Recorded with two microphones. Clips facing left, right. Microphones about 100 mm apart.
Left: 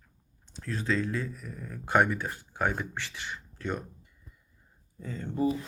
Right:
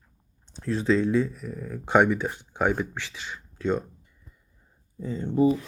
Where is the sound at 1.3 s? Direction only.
5° right (ahead or behind).